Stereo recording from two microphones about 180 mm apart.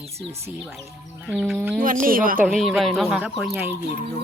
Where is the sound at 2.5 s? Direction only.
Centre (ahead or behind).